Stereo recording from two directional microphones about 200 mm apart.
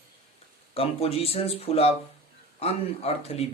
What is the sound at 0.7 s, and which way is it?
Speech, 30° left (ahead or behind).